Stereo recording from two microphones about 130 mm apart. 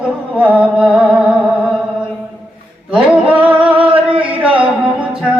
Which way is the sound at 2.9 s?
10° right (ahead or behind).